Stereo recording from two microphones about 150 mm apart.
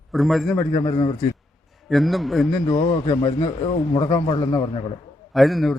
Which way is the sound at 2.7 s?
30° left (ahead or behind).